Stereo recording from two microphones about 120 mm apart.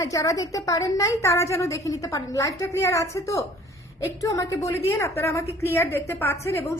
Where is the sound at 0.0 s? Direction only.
30° left (ahead or behind).